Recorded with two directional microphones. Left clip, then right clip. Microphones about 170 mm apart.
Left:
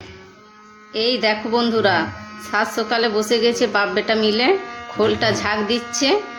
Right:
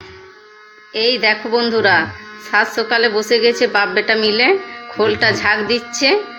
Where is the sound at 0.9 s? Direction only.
20° left (ahead or behind).